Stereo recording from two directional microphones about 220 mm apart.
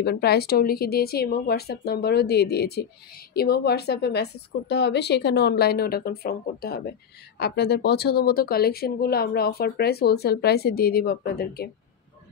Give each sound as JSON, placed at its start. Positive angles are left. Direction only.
{"t": 0.0, "sound": "speech", "side_deg": 45}